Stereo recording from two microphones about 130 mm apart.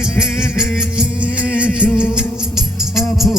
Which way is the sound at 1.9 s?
15° left (ahead or behind).